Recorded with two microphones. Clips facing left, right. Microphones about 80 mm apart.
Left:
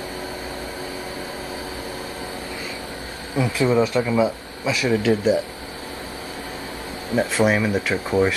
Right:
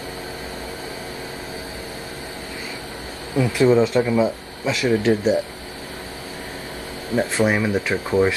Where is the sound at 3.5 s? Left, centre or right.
Right.